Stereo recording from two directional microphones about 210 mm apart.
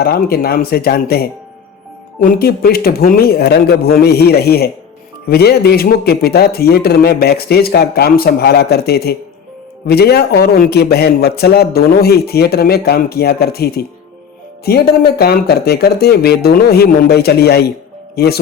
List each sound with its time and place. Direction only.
0.0 s a man's voice: 45° left (ahead or behind)